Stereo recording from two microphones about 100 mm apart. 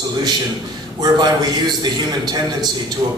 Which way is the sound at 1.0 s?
45° right (ahead or behind).